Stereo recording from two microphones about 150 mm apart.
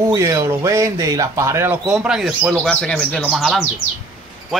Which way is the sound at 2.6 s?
5° left (ahead or behind).